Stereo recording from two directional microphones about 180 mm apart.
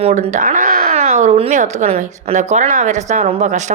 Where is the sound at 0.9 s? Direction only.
35° right (ahead or behind).